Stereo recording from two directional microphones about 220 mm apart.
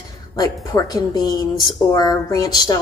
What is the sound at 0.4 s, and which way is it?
Speech, 15° left (ahead or behind).